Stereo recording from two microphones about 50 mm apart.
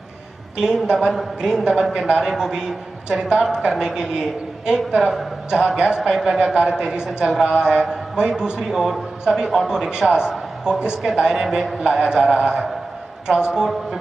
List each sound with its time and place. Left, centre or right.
0.6 s a man's voice: centre
0.9 s a woman's voice: centre
1.4 s a man's voice: centre